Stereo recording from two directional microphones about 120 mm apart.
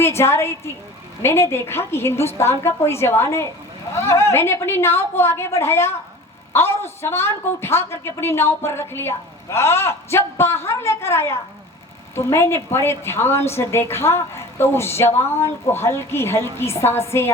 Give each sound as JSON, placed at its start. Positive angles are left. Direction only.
{"t": 0.0, "sound": "a woman's voice", "side_deg": 20}